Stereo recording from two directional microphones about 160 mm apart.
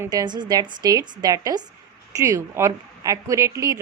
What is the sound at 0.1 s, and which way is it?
A woman's voice, 25° right (ahead or behind).